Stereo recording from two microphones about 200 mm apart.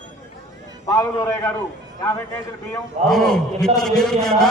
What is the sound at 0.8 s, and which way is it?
Speech, 10° left (ahead or behind).